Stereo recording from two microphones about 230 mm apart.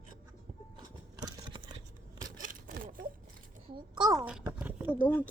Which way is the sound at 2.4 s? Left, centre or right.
Right.